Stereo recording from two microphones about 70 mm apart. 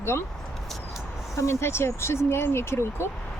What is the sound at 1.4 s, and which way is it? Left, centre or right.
Speech, left.